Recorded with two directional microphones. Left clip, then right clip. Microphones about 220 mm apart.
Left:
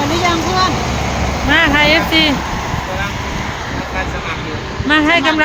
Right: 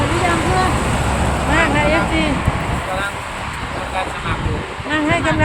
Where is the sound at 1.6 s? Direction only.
20° left (ahead or behind).